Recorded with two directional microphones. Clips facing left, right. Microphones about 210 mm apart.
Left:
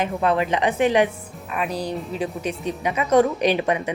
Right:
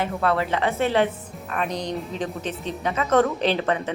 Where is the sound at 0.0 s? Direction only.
20° left (ahead or behind).